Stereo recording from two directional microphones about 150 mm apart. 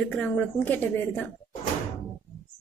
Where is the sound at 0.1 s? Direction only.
10° left (ahead or behind).